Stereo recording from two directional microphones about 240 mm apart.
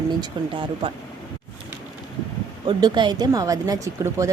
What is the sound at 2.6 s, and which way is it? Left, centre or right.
Speech, centre.